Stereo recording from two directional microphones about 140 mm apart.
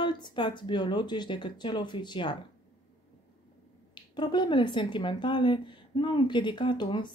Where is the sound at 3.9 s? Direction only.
35° left (ahead or behind).